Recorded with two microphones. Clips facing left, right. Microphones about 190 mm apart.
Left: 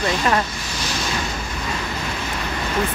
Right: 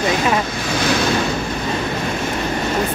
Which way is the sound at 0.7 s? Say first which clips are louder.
Right 10 dB; 60° right (ahead or behind).